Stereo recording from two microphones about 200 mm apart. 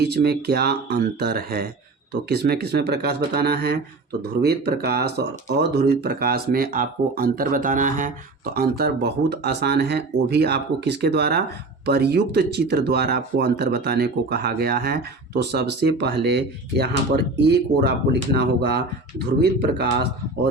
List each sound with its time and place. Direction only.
0.0 s speech: 55° right (ahead or behind)
8.5 s speech: 50° right (ahead or behind)